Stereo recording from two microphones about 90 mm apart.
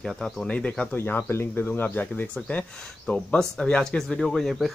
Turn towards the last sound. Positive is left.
turn(degrees=0)  # may be behind; listen again after turning